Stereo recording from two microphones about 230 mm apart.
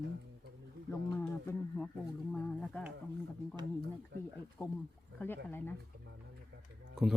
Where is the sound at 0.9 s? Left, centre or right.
Centre.